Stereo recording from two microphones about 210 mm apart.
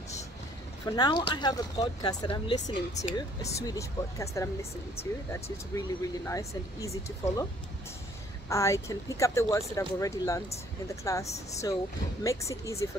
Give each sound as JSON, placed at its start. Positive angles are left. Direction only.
{"t": 0.8, "sound": "speech", "side_deg": 20}
{"t": 8.5, "sound": "speech", "side_deg": 15}